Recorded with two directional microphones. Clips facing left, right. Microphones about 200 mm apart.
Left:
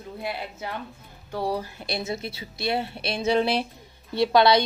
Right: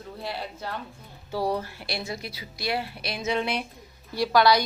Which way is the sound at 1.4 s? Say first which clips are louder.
Left 2 dB; 15° left (ahead or behind).